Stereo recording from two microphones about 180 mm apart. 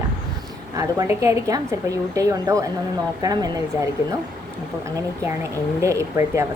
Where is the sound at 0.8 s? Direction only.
15° right (ahead or behind).